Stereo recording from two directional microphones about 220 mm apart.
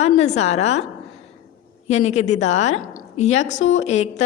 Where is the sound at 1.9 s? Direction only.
30° left (ahead or behind).